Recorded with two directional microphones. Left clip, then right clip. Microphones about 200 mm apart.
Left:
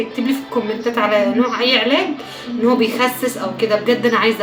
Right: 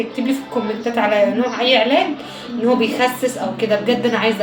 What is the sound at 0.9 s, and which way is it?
A woman's voice, 15° left (ahead or behind).